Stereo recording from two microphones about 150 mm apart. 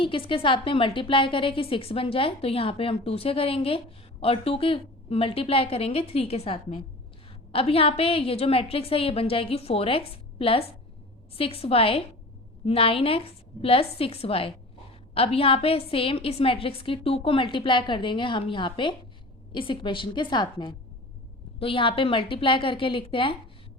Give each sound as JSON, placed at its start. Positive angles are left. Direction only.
{"t": 0.0, "sound": "a woman's voice", "side_deg": 35}